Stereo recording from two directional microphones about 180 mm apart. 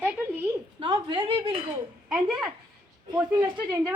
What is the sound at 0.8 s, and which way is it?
Speech, 30° right (ahead or behind).